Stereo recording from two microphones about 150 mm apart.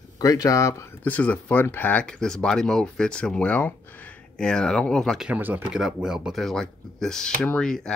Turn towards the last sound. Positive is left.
turn(degrees=5)  # may be behind; listen again after turning